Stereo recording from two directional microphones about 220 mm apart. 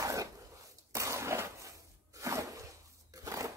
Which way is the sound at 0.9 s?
15° right (ahead or behind).